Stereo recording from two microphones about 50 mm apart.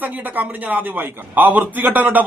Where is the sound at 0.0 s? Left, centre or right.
Right.